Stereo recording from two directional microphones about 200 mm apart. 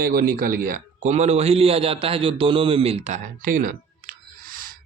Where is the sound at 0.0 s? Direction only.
45° right (ahead or behind).